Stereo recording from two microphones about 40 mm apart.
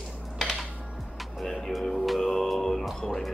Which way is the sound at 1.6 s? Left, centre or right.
Centre.